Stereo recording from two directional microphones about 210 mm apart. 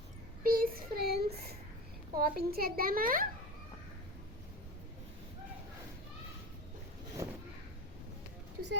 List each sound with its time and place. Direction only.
0.4 s child singing: 45° right (ahead or behind)
2.1 s a child's voice: 45° right (ahead or behind)
7.2 s a sound: 15° right (ahead or behind)